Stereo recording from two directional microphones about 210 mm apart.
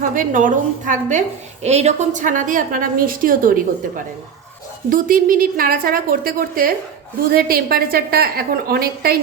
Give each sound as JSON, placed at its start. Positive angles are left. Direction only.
{"t": 0.0, "sound": "a woman's voice", "side_deg": -40}
{"t": 4.9, "sound": "a woman's voice", "side_deg": -40}